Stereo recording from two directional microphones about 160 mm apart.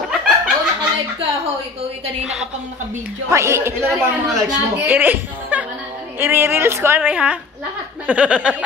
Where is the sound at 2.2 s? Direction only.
5° right (ahead or behind).